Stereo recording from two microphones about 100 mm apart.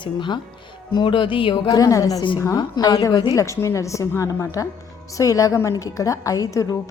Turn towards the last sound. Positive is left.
turn(degrees=30)  # may be behind; listen again after turning